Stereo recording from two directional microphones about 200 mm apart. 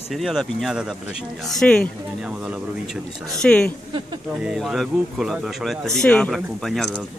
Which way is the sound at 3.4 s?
5° left (ahead or behind).